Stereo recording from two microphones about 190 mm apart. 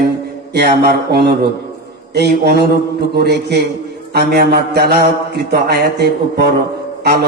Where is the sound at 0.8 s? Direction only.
55° right (ahead or behind).